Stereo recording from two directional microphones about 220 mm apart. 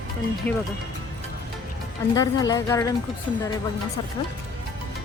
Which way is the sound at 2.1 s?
15° left (ahead or behind).